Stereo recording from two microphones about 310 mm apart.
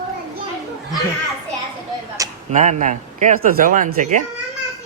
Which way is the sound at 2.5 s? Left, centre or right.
Right.